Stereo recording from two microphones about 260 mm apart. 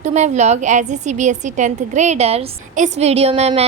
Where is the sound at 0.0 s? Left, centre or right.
Right.